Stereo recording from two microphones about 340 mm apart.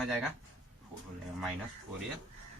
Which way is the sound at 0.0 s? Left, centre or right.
Centre.